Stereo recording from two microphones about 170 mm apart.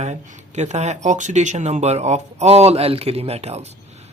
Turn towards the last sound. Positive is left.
turn(degrees=-40)  # may be behind; listen again after turning